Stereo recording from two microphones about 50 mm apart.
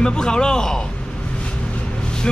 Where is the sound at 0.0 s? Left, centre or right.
Centre.